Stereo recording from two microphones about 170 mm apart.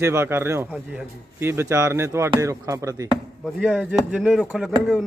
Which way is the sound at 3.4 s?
Centre (ahead or behind).